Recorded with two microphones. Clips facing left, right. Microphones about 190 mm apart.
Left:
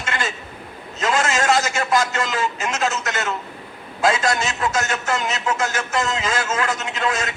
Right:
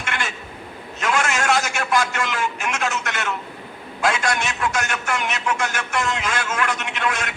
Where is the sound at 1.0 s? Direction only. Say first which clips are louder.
Left 2 dB; 20° left (ahead or behind).